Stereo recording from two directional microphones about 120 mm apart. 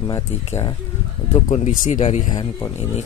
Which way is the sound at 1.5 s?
65° left (ahead or behind).